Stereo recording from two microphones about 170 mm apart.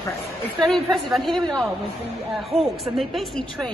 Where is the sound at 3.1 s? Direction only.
Centre (ahead or behind).